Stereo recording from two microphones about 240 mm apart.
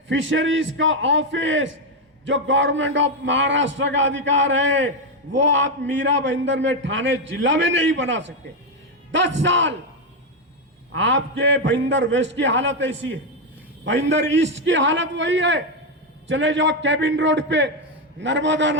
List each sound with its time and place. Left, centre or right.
0.1 s a man's voice: right
10.9 s a man's voice: right